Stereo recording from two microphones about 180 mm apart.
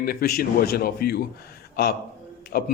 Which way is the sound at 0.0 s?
55° left (ahead or behind).